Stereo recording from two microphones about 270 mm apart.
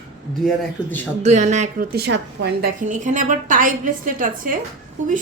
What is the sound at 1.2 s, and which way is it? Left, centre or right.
Speech, right.